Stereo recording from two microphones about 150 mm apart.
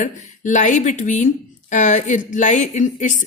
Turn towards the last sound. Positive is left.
turn(degrees=55)  # may be behind; listen again after turning